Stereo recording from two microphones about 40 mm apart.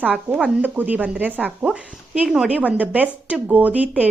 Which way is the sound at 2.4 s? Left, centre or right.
Right.